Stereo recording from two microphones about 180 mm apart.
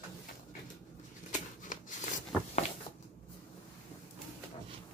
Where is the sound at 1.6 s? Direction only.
45° left (ahead or behind).